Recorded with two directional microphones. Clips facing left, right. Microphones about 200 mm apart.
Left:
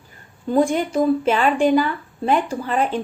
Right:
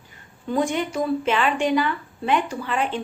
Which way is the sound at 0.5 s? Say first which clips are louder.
Left 5 dB; 40° left (ahead or behind).